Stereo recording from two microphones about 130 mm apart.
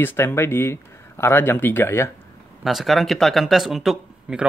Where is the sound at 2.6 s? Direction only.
Centre (ahead or behind).